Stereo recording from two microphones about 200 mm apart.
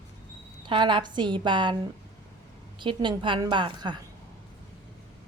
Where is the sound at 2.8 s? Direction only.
25° right (ahead or behind).